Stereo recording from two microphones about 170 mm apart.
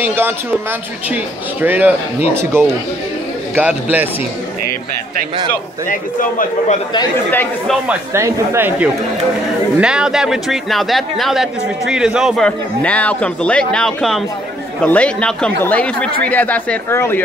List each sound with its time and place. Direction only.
0.0 s speech: 15° right (ahead or behind)
5.9 s a man's voice: 50° left (ahead or behind)
7.2 s a man's voice: 10° left (ahead or behind)
7.9 s a man's voice: 15° right (ahead or behind)
12.4 s a man's voice: 10° left (ahead or behind)